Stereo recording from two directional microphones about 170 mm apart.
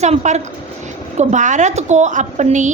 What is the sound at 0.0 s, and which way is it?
A woman's voice, 40° right (ahead or behind).